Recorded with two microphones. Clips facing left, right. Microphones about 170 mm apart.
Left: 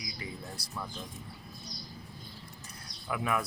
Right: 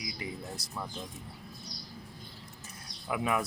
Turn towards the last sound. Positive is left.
turn(degrees=-15)  # may be behind; listen again after turning